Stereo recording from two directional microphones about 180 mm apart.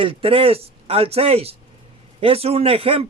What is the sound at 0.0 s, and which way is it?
A man's voice, 30° right (ahead or behind).